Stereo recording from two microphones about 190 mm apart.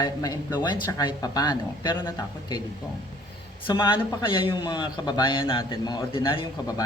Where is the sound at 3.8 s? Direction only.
25° left (ahead or behind).